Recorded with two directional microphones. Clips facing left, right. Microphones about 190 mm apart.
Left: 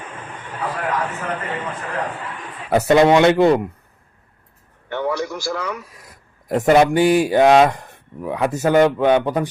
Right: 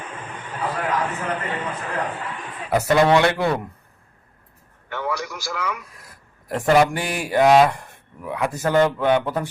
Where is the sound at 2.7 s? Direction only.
20° left (ahead or behind).